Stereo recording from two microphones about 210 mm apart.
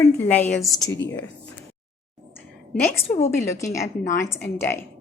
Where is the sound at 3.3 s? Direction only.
15° left (ahead or behind).